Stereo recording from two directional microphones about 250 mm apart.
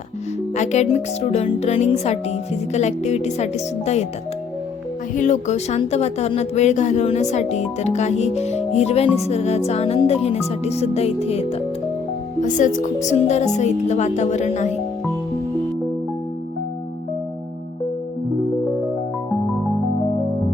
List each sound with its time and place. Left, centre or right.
0.5 s speech: left
5.1 s speech: left